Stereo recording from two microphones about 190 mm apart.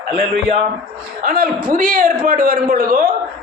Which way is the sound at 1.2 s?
50° right (ahead or behind).